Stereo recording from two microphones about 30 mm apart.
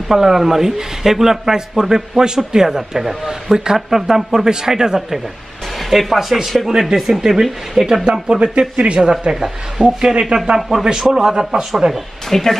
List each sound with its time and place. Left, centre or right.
0.1 s a man's voice: centre
5.8 s a man's voice: centre
8.0 s a man's voice: right
9.3 s a man's voice: centre
11.8 s speech: right
12.3 s speech: centre